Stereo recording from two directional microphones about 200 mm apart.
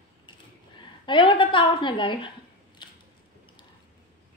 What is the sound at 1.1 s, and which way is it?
A woman's voice, 25° left (ahead or behind).